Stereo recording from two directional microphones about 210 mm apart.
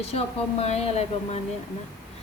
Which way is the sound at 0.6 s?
30° left (ahead or behind).